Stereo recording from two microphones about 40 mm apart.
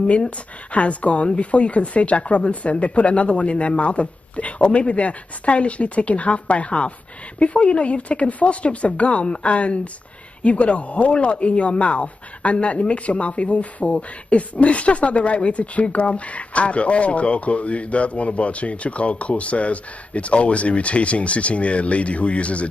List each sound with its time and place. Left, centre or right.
0.1 s speech: left